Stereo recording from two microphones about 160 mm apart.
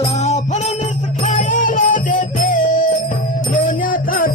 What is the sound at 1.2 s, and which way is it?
Music, 55° left (ahead or behind).